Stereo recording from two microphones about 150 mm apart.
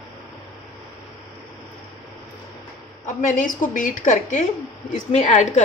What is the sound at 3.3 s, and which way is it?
A woman's voice, 60° left (ahead or behind).